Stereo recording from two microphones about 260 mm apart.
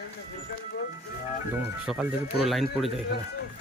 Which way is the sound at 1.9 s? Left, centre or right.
Centre.